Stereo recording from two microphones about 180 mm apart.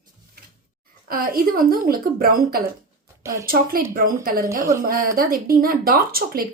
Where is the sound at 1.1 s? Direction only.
55° right (ahead or behind).